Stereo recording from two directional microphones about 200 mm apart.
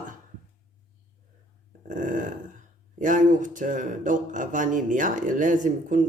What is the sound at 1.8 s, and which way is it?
Speech, 40° right (ahead or behind).